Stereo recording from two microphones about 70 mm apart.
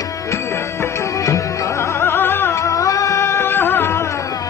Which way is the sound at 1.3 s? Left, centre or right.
Left.